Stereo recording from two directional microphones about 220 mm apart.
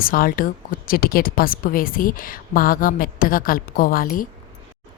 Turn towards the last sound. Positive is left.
turn(degrees=40)  # may be behind; listen again after turning